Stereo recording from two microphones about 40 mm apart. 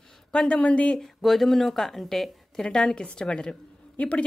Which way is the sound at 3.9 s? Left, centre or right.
Left.